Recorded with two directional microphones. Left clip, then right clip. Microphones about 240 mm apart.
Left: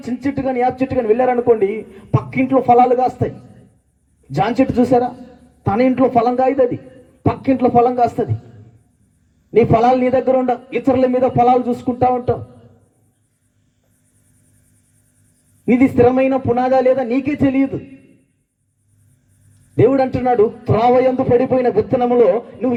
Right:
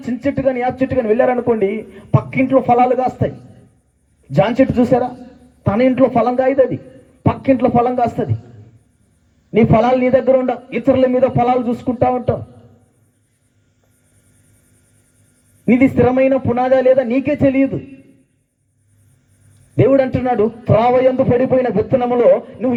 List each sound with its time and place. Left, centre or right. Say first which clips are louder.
0.1 s a man's voice: right 3 dB; right
4.5 s a man's voice: right 1 dB; right
9.9 s a man's voice: right 2 dB; right
15.6 s a man's voice: left 1 dB; right
19.8 s a man's voice: right 1 dB; right